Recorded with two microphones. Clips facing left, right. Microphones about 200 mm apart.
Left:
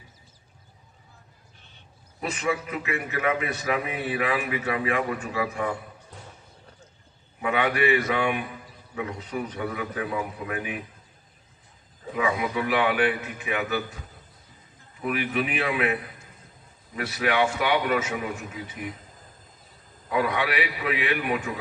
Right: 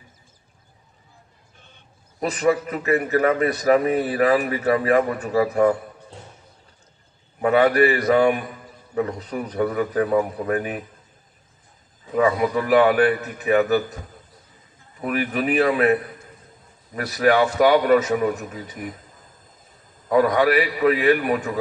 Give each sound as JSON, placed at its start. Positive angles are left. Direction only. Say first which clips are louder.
{"t": 1.6, "sound": "bleat", "louder": "right 5 dB", "side_deg": -50}
{"t": 2.2, "sound": "a man's voice", "louder": "right 8 dB", "side_deg": -35}
{"t": 7.4, "sound": "a man's voice", "louder": "right 7 dB", "side_deg": -40}
{"t": 12.2, "sound": "a man's voice", "louder": "right 7 dB", "side_deg": -45}
{"t": 20.1, "sound": "a man's voice", "louder": "right 8 dB", "side_deg": -40}